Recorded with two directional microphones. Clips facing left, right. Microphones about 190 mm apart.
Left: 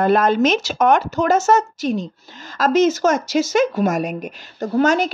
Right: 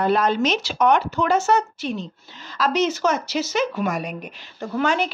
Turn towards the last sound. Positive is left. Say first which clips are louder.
# left 5 dB
turn(degrees=40)  # may be behind; listen again after turning